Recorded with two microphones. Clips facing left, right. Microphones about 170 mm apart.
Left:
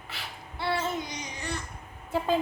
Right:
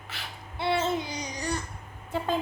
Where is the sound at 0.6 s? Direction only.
20° right (ahead or behind).